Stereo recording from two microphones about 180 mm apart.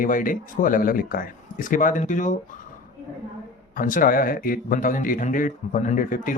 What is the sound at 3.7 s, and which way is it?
Speech, 50° left (ahead or behind).